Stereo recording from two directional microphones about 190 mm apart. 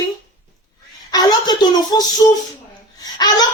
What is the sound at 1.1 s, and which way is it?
Speech, 20° left (ahead or behind).